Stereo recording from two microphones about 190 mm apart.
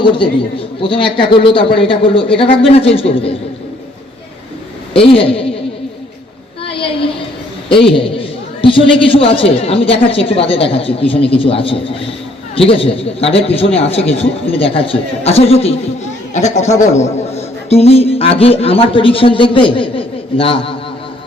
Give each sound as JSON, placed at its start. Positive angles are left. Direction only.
{"t": 0.0, "sound": "a man's voice", "side_deg": 25}
{"t": 5.0, "sound": "a man's voice", "side_deg": 30}
{"t": 6.7, "sound": "a sound", "side_deg": 30}
{"t": 7.7, "sound": "a man's voice", "side_deg": 30}